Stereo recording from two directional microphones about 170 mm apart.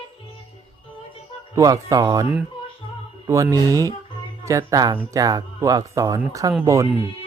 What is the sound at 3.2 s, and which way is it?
Speech, 20° right (ahead or behind).